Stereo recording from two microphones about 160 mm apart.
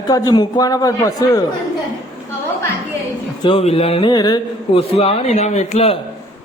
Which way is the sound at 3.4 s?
35° left (ahead or behind).